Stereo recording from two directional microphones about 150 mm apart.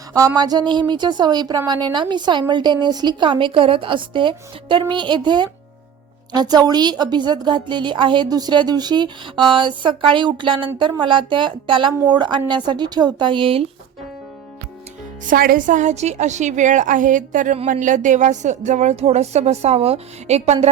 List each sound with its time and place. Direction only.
0.1 s a woman's voice: 25° right (ahead or behind)
15.3 s a woman's voice: 70° right (ahead or behind); by 20.7 s 45° right (ahead or behind)